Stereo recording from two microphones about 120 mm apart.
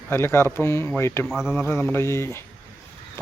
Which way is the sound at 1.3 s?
5° right (ahead or behind).